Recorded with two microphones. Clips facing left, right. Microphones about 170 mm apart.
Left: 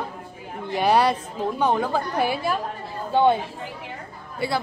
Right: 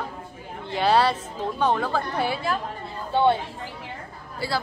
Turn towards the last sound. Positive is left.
turn(degrees=20)  # may be behind; listen again after turning